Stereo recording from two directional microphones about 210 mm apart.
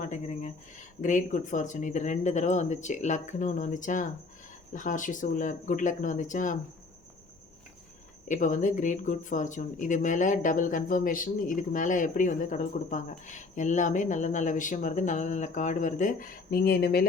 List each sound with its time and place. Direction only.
0.0 s speech: 35° left (ahead or behind)
8.3 s speech: 35° left (ahead or behind)